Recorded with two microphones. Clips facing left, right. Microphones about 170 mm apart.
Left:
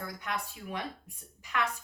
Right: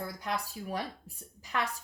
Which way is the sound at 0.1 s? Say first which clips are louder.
Right 2 dB; 35° right (ahead or behind).